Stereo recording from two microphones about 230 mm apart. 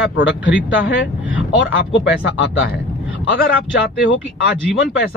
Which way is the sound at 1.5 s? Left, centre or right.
Left.